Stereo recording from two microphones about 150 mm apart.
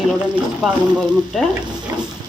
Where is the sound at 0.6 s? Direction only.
Centre (ahead or behind).